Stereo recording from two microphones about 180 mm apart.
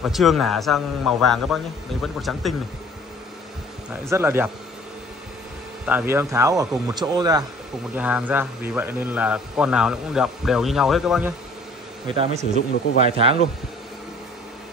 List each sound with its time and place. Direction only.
0.0 s a man's voice: centre (ahead or behind)
3.9 s speech: 15° right (ahead or behind)
5.9 s speech: 10° right (ahead or behind)
7.9 s a man's voice: 10° right (ahead or behind)
12.1 s speech: 35° right (ahead or behind)